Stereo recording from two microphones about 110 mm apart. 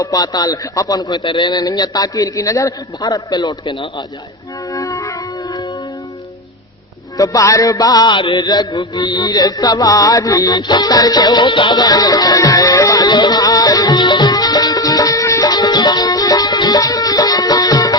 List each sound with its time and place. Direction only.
0.0 s a man's voice: 35° left (ahead or behind)
1.2 s a man's voice: 45° left (ahead or behind)
4.7 s music: 30° left (ahead or behind)
7.2 s a man's voice: 30° left (ahead or behind)
9.0 s music: 40° left (ahead or behind)